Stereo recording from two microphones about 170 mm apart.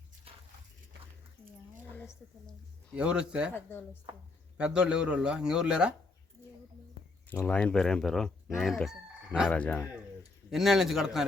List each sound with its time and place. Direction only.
0.3 s a sound: 35° right (ahead or behind)
2.9 s speech: 5° right (ahead or behind)
3.5 s speech: 10° left (ahead or behind)
4.5 s speech: 5° right (ahead or behind)
7.3 s speech: 10° left (ahead or behind)
9.5 s speech: 10° left (ahead or behind)
10.5 s speech: centre (ahead or behind)